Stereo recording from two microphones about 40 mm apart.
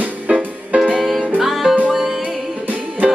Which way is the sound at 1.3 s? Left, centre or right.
Centre.